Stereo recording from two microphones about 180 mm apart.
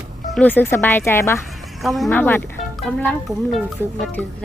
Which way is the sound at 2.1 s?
10° left (ahead or behind).